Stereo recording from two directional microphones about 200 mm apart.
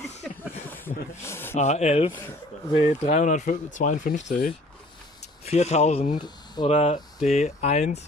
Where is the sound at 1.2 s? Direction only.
10° left (ahead or behind).